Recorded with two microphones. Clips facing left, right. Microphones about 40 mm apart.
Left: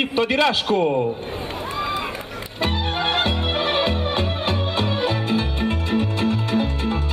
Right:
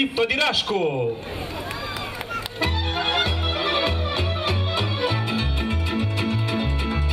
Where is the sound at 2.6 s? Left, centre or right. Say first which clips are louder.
Left 3 dB; left.